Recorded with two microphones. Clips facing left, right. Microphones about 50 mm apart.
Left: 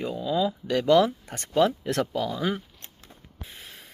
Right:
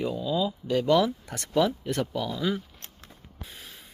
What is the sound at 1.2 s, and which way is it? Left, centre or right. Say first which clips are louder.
Speech: left 2 dB; left.